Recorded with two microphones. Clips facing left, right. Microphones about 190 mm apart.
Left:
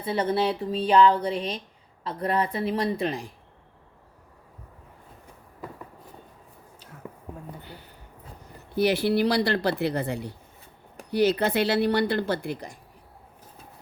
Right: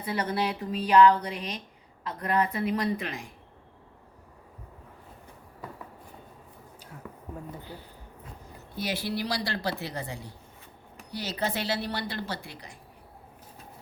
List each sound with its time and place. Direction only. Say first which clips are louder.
0.0 s speech: left 5 dB; 25° left (ahead or behind)
7.0 s a sound: left 4 dB; 20° left (ahead or behind)
8.7 s speech: left 10 dB; 60° left (ahead or behind)